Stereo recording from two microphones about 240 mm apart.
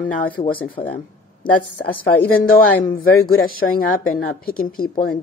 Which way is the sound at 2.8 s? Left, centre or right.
Left.